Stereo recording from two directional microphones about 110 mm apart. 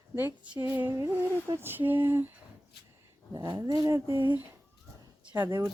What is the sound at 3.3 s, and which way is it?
Speech, 35° right (ahead or behind).